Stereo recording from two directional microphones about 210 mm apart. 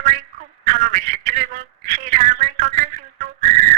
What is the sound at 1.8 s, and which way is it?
Whistle, 35° right (ahead or behind).